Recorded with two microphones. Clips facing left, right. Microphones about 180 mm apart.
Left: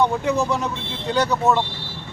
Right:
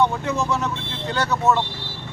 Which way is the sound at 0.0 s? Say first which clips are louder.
Left 2 dB; 15° left (ahead or behind).